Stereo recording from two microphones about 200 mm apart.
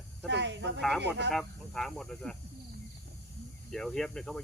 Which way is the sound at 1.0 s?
60° right (ahead or behind).